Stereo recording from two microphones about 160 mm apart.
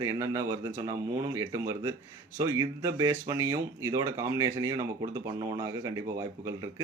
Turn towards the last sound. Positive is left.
turn(degrees=-20)  # may be behind; listen again after turning